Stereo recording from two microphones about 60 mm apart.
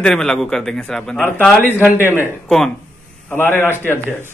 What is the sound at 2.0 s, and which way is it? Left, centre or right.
Speech, left.